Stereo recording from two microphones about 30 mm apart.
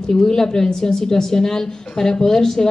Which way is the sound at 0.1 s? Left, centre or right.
Left.